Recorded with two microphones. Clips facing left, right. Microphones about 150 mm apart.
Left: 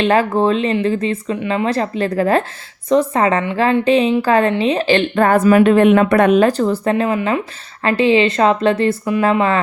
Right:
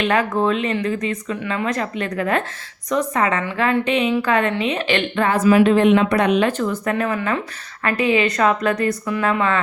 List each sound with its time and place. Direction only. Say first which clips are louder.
0.0 s a woman's voice: left 4 dB; 30° left (ahead or behind)
6.9 s speech: left 4 dB; 20° left (ahead or behind)